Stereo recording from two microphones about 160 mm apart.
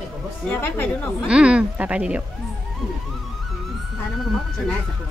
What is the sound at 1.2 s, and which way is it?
Speech, 5° right (ahead or behind).